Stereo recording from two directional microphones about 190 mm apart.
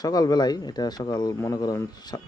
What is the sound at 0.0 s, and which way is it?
Speech, 20° left (ahead or behind).